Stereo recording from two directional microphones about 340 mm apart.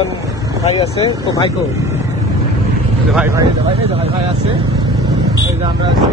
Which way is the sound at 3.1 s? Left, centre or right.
Centre.